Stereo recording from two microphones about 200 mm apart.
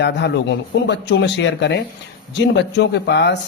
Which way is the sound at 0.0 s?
60° left (ahead or behind).